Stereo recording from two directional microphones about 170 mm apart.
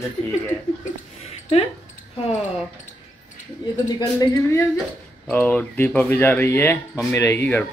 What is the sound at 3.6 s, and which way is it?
Speech, 25° left (ahead or behind).